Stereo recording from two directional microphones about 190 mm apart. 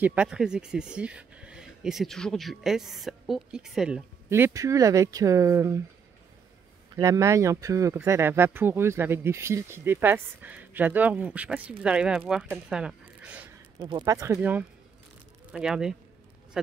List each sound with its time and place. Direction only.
0.0 s speech: 5° right (ahead or behind)
4.3 s speech: 15° right (ahead or behind)
7.0 s speech: 15° right (ahead or behind)
13.7 s speech: 25° right (ahead or behind); by 16.7 s centre (ahead or behind)